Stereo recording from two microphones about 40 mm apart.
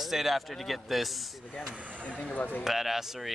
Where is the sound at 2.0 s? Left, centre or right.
Left.